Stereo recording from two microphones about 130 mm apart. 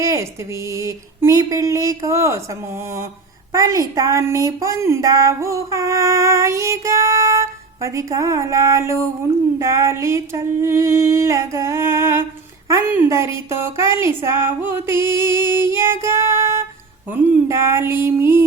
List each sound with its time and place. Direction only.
0.0 s speech: 25° right (ahead or behind)